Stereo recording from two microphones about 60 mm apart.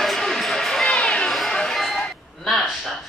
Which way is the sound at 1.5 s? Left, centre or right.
Centre.